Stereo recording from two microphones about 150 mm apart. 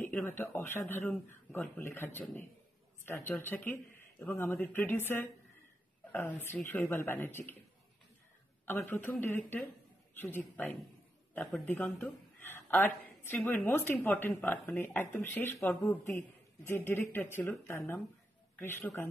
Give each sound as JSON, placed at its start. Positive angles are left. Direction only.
{"t": 0.0, "sound": "a sound", "side_deg": 10}
{"t": 0.4, "sound": "speech", "side_deg": 15}
{"t": 8.6, "sound": "speech", "side_deg": 15}
{"t": 10.1, "sound": "a woman's voice", "side_deg": 10}